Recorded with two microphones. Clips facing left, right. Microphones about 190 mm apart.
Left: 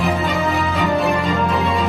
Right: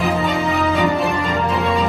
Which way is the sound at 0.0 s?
Centre (ahead or behind).